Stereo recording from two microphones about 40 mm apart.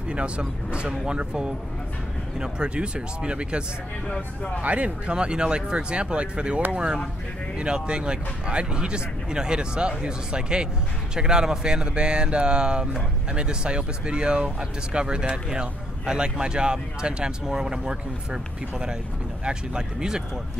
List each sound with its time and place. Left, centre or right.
0.1 s speech: right